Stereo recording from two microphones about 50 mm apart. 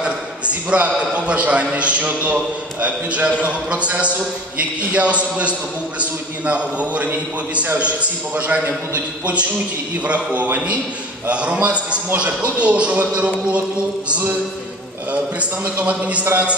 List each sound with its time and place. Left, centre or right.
0.0 s a man's voice: right
15.8 s a man's voice: right